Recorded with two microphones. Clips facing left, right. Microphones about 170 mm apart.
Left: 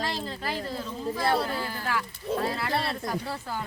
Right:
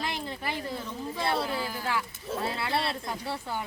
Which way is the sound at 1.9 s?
25° right (ahead or behind).